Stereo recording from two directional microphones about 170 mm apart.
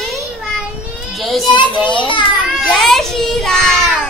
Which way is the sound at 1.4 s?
25° left (ahead or behind).